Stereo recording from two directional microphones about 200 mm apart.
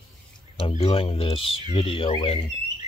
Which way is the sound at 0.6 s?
30° left (ahead or behind).